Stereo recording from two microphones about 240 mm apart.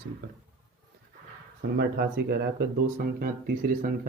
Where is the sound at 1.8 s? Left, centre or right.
Right.